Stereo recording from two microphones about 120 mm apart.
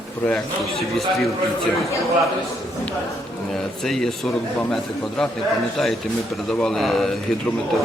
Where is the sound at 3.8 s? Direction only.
5° left (ahead or behind).